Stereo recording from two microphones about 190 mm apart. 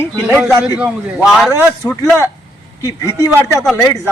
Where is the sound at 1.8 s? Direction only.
10° left (ahead or behind).